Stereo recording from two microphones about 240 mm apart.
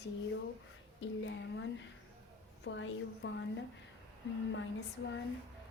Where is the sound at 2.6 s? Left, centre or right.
Left.